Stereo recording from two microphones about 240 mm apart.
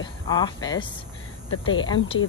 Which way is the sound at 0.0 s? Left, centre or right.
Centre.